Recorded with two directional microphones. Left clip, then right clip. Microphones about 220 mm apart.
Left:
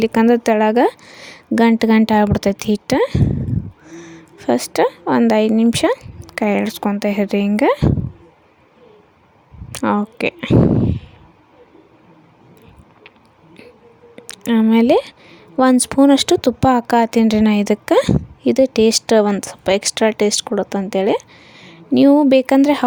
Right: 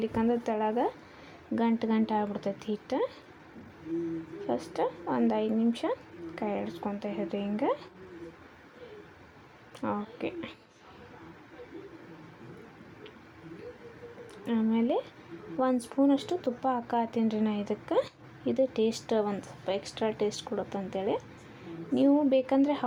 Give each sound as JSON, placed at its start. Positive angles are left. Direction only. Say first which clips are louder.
{"t": 0.0, "sound": "speech", "louder": "left 15 dB", "side_deg": 55}
{"t": 4.4, "sound": "speech", "louder": "left 16 dB", "side_deg": 55}
{"t": 9.7, "sound": "speech", "louder": "left 15 dB", "side_deg": 55}
{"t": 14.3, "sound": "speech", "louder": "left 15 dB", "side_deg": 55}